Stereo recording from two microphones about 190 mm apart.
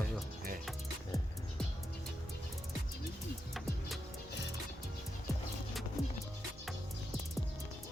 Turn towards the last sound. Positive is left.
turn(degrees=0)  # may be behind; listen again after turning